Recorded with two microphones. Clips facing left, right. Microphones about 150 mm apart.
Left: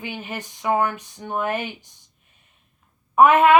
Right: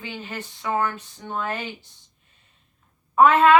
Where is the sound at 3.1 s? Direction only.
15° left (ahead or behind).